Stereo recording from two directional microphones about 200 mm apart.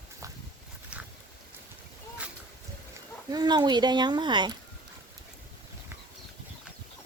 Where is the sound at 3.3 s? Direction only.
20° right (ahead or behind).